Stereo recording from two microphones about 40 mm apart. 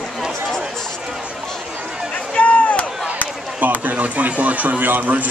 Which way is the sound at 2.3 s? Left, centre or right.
Left.